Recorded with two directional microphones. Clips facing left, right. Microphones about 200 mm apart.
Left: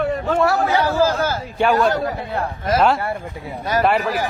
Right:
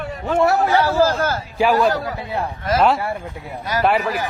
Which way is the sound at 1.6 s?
Centre (ahead or behind).